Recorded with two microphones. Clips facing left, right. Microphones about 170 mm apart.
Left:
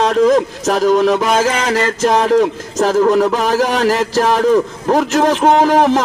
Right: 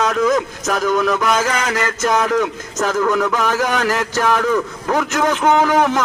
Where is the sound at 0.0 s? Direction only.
35° left (ahead or behind).